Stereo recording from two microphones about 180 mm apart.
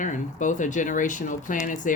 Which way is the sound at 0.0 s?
45° left (ahead or behind).